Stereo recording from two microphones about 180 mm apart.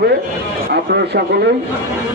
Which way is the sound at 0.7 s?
60° right (ahead or behind).